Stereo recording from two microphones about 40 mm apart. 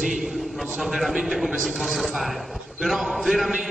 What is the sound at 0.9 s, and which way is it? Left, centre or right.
A man's voice, centre.